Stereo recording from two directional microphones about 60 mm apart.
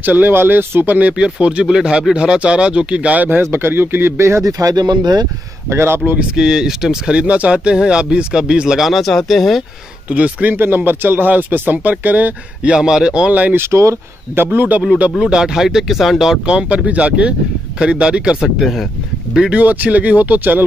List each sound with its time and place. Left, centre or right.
0.0 s speech: right
4.5 s speech: right
5.7 s speech: right
6.3 s speech: centre
10.0 s speech: right
12.7 s speech: centre
13.6 s speech: right
14.3 s speech: right
15.0 s speech: centre
18.6 s speech: centre
19.5 s speech: right